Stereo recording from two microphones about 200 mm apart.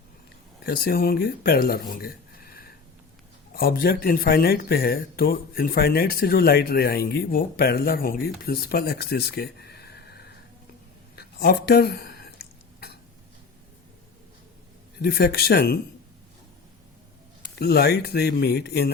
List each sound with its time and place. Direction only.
0.6 s speech: 50° left (ahead or behind)
14.9 s speech: 50° left (ahead or behind)
17.6 s speech: 55° left (ahead or behind)